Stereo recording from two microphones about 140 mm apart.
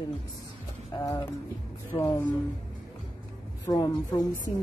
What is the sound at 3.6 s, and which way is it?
Speech, 25° left (ahead or behind).